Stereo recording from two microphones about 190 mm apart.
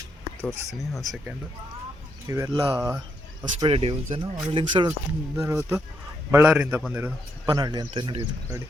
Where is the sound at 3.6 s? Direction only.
30° right (ahead or behind).